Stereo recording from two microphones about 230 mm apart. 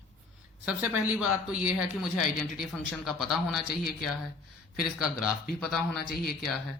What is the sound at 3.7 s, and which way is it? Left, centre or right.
Speech, left.